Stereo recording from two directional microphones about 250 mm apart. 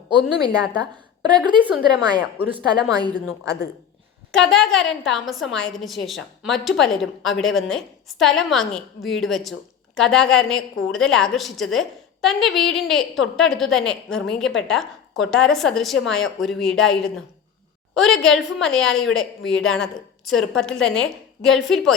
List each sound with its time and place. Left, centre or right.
0.1 s a woman's voice: centre
4.3 s a woman's voice: centre